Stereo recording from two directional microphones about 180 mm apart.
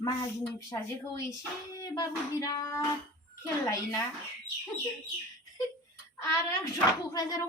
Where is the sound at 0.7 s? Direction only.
20° left (ahead or behind).